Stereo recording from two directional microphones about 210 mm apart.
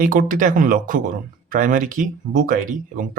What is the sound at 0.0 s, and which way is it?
Speech, 40° right (ahead or behind).